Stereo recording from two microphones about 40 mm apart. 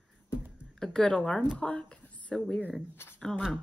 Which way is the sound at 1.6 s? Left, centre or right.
Left.